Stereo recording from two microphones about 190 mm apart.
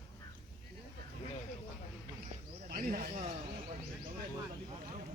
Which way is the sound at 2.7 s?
45° right (ahead or behind).